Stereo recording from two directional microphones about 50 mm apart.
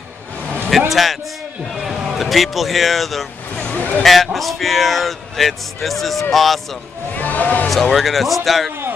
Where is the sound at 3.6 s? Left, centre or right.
Left.